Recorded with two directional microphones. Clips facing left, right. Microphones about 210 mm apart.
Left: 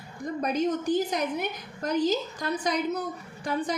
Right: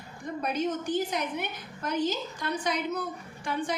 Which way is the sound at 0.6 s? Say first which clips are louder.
Left 3 dB; 40° left (ahead or behind).